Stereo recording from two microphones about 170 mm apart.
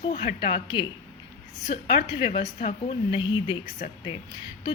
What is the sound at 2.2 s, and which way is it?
A woman's voice, 35° left (ahead or behind).